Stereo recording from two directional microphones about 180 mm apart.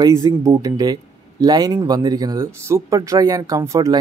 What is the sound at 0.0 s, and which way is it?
Speech, 20° right (ahead or behind).